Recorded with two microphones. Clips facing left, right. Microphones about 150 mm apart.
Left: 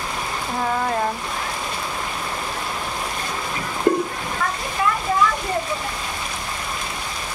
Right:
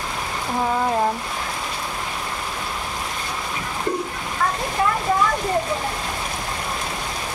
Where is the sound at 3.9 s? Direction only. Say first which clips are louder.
Left 7 dB; 60° left (ahead or behind).